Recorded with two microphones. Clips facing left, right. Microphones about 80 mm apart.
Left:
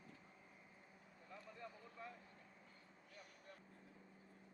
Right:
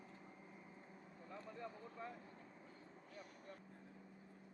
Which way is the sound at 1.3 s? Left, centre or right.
Right.